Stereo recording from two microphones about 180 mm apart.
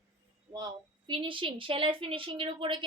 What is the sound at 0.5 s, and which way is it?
Speech, 25° right (ahead or behind).